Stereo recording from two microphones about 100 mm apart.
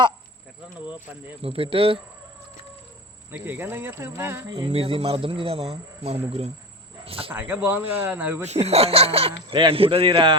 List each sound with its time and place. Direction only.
0.9 s speech: 20° right (ahead or behind)
1.4 s speech: 70° right (ahead or behind)
3.3 s speech: 20° right (ahead or behind)
4.4 s speech: 45° right (ahead or behind)
4.7 s speech: 75° right (ahead or behind)
7.0 s cricket: 70° right (ahead or behind)
7.3 s speech: 15° right (ahead or behind)
8.4 s speech: 90° right; by 9.6 s 75° right (ahead or behind)
9.6 s a man's voice: 65° right (ahead or behind)